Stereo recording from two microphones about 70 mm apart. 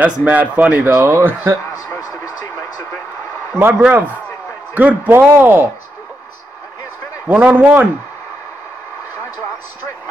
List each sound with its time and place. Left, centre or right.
0.0 s a man's voice: right
3.5 s a man's voice: right
7.2 s a man's voice: right